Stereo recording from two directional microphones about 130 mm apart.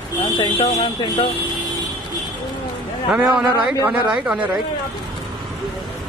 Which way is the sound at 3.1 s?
5° right (ahead or behind).